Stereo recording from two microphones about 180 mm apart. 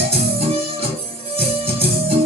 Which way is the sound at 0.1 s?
30° right (ahead or behind).